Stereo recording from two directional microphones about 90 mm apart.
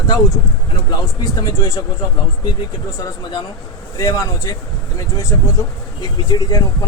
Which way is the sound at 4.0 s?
40° left (ahead or behind).